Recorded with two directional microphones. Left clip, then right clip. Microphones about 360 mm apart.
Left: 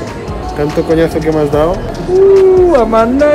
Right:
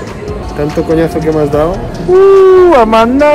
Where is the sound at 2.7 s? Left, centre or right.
Centre.